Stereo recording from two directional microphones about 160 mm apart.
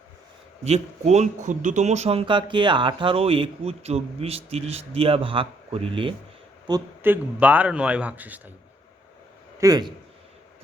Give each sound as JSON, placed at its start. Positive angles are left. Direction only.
{"t": 0.6, "sound": "a man's voice", "side_deg": -45}
{"t": 7.0, "sound": "a man's voice", "side_deg": -10}
{"t": 9.6, "sound": "a man's voice", "side_deg": -25}